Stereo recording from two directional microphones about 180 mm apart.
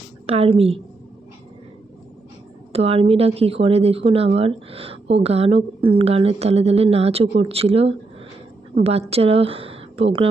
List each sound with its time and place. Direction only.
0.3 s speech: 35° right (ahead or behind)
2.7 s a woman's voice: 35° right (ahead or behind)